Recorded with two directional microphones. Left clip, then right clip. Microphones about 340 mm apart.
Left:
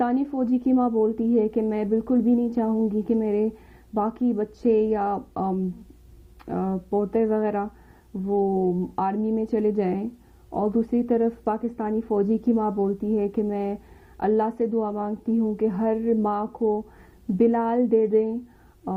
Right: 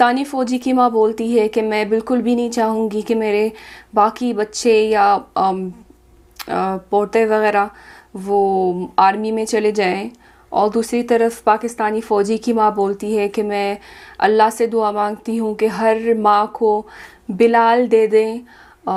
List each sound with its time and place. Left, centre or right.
0.0 s a woman's voice: centre
8.3 s speech: centre
9.0 s a woman's voice: centre
16.6 s a woman's voice: centre
17.0 s a woman's voice: centre